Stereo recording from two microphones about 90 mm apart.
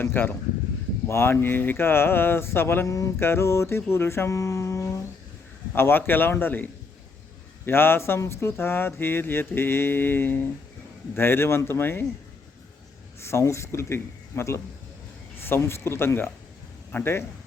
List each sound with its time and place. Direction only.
0.0 s speech: 25° left (ahead or behind)
13.2 s a man's voice: 30° left (ahead or behind)